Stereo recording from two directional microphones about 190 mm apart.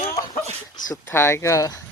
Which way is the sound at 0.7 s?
20° left (ahead or behind).